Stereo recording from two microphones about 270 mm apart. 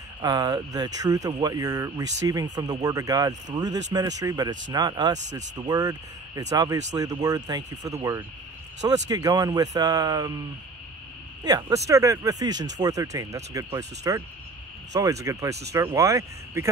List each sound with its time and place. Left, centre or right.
0.2 s speech: centre
11.4 s speech: centre